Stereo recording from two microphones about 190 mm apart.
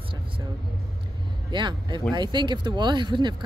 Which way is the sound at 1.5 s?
25° right (ahead or behind).